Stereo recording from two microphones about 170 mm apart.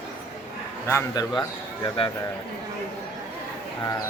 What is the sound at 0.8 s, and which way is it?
Speech, 20° left (ahead or behind).